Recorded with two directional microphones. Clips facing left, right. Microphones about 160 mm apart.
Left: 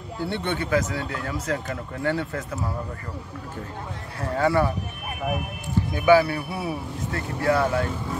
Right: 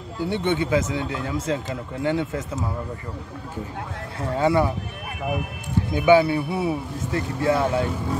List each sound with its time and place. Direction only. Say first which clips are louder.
0.2 s speech: right 4 dB; 15° right (ahead or behind)
4.4 s speech: right 1 dB; 15° right (ahead or behind)
5.9 s speech: right 2 dB; 20° right (ahead or behind)